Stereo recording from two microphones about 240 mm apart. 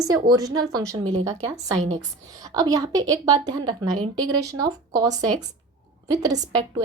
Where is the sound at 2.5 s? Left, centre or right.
Centre.